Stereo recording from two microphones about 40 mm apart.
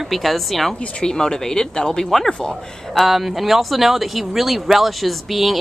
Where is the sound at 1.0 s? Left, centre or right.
Centre.